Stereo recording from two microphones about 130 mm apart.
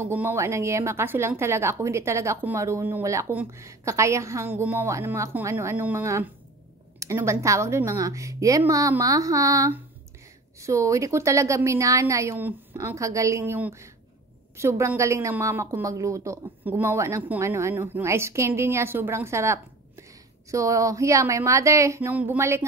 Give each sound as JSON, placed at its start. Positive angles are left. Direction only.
{"t": 0.0, "sound": "speech", "side_deg": -15}
{"t": 16.4, "sound": "a woman's voice", "side_deg": -15}